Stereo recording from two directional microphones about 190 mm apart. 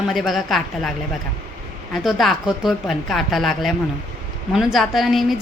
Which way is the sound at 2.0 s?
Centre (ahead or behind).